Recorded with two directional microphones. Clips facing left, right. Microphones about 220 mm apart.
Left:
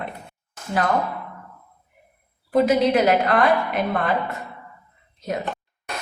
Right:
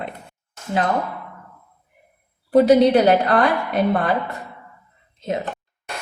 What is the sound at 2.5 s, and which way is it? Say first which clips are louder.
A woman's voice: right 5 dB; 35° right (ahead or behind).